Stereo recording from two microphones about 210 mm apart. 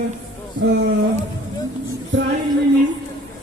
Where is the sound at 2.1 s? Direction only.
60° right (ahead or behind).